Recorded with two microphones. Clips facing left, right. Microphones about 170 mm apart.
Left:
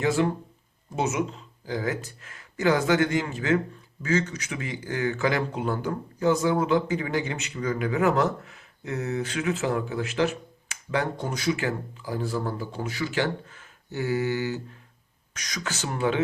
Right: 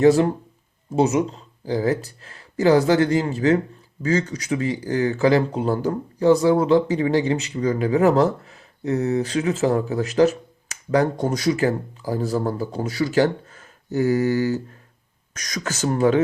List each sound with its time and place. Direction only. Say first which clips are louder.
0.0 s speech: right 8 dB; 40° right (ahead or behind)